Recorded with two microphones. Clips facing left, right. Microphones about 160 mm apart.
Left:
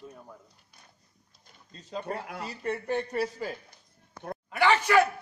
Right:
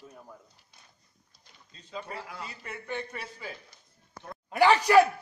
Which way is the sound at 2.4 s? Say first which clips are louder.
Left 8 dB; 40° left (ahead or behind).